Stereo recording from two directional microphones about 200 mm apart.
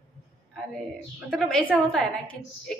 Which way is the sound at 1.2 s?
5° left (ahead or behind).